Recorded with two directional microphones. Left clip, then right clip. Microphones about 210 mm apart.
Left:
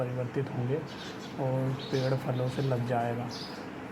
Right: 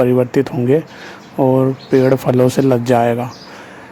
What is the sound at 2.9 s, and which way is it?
Speech, 55° right (ahead or behind).